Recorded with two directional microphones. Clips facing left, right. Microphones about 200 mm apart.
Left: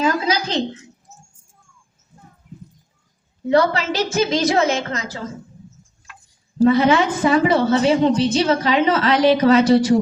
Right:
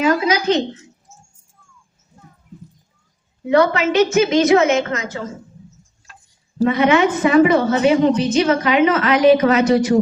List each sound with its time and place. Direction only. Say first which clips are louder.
0.0 s a sound: right 3 dB; 35° left (ahead or behind)
3.5 s a woman's voice: right 3 dB; 35° left (ahead or behind)
6.6 s a woman's voice: even; 35° left (ahead or behind)